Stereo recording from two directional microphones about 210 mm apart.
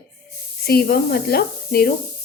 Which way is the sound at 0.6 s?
50° left (ahead or behind).